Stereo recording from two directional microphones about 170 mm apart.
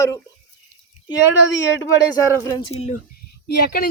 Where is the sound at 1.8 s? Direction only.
20° left (ahead or behind).